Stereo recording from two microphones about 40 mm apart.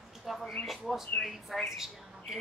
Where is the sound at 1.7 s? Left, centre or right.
Centre.